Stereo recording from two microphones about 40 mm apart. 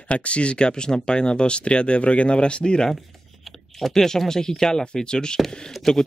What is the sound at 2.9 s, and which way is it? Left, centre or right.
Speech, centre.